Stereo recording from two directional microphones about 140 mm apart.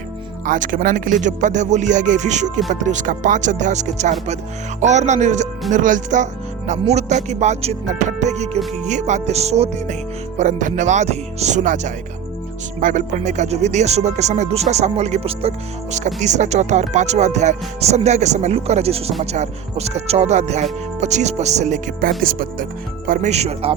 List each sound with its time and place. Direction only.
0.4 s speech: 70° right (ahead or behind)
6.7 s speech: 55° right (ahead or behind)
10.3 s speech: 65° right (ahead or behind)
22.2 s speech: 90° right
23.0 s speech: 80° right
23.3 s speech: 50° right (ahead or behind)